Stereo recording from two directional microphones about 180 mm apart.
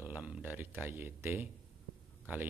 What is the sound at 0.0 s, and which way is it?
A man's voice, 10° right (ahead or behind).